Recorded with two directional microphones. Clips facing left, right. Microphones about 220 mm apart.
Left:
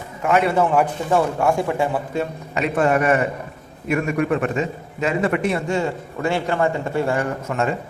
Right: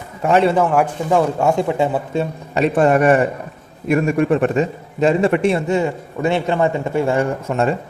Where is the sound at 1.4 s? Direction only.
20° right (ahead or behind).